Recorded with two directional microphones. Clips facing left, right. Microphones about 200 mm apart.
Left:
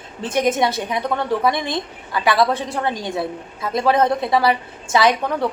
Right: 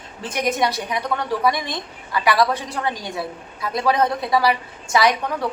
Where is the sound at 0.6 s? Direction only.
25° left (ahead or behind).